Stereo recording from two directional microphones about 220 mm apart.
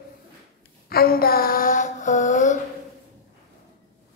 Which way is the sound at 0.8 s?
45° left (ahead or behind).